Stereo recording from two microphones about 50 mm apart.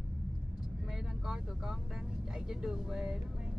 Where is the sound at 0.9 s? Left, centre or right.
Centre.